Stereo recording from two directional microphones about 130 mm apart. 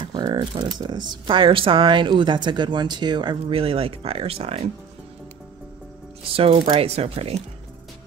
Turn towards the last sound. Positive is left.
turn(degrees=-50)  # may be behind; listen again after turning